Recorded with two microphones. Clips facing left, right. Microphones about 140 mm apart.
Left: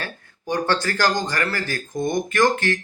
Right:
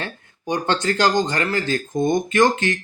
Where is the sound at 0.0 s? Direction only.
20° right (ahead or behind).